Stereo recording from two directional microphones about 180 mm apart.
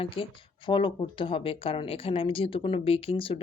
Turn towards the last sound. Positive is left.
turn(degrees=30)  # may be behind; listen again after turning